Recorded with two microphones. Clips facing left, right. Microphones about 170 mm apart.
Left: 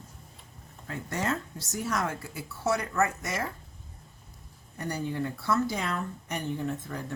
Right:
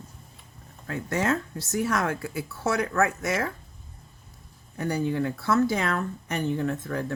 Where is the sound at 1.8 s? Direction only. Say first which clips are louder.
Right 4 dB; 60° right (ahead or behind).